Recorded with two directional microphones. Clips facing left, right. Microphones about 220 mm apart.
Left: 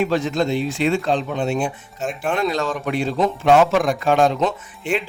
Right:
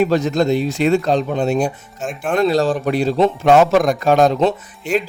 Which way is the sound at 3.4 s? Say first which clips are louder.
Right 2 dB; 45° right (ahead or behind).